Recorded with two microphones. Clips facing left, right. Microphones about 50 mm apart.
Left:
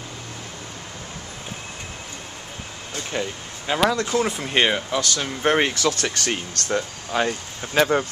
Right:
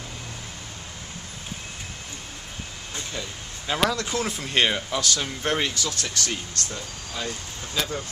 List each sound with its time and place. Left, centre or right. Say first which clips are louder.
3.1 s speech: left 9 dB; left
3.6 s speech: left 4 dB; centre
5.0 s speech: left 1 dB; centre
5.4 s speech: left 8 dB; left
5.8 s speech: left 6 dB; left